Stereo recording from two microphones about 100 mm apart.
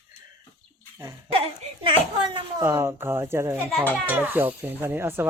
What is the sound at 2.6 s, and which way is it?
Speech, 25° right (ahead or behind).